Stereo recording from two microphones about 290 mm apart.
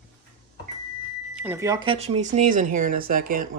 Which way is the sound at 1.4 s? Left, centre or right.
Centre.